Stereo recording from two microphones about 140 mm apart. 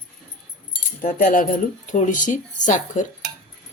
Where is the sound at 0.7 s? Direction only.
70° left (ahead or behind).